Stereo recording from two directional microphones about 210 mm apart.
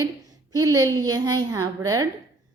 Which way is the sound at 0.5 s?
15° right (ahead or behind).